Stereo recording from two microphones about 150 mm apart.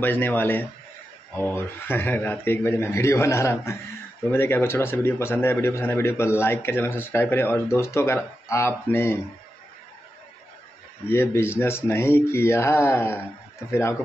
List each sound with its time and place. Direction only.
0.0 s a man's voice: 10° left (ahead or behind)
11.1 s a man's voice: 15° left (ahead or behind)